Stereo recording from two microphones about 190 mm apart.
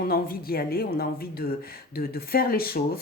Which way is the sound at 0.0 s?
50° left (ahead or behind).